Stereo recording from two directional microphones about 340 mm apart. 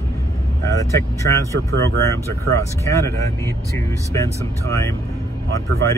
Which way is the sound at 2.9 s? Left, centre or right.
Centre.